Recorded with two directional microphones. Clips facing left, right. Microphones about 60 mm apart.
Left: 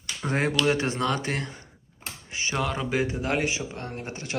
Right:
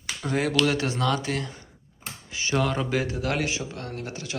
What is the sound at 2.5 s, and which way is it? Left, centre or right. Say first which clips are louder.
Speech: right 4 dB; centre.